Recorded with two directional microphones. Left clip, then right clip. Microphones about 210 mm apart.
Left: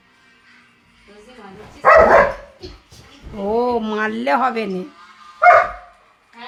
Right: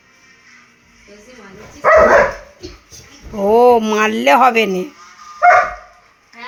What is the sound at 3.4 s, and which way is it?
Speech, 15° right (ahead or behind).